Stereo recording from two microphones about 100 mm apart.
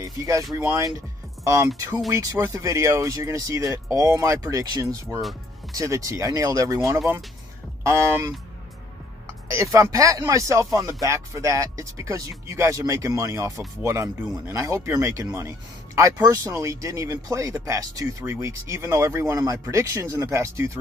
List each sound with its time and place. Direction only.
0.0 s speech: 35° right (ahead or behind)
0.9 s music: 30° right (ahead or behind)
2.0 s speech: 35° right (ahead or behind)
7.8 s a man's voice: 30° right (ahead or behind)
9.5 s a man's voice: 30° right (ahead or behind)